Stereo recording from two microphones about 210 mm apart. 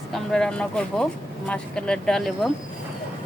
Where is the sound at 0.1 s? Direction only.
Centre (ahead or behind).